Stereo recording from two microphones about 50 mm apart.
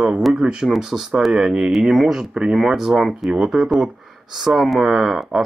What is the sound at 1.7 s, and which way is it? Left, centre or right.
Speech, centre.